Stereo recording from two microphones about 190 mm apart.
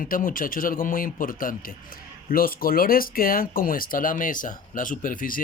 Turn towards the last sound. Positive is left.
turn(degrees=45)  # may be behind; listen again after turning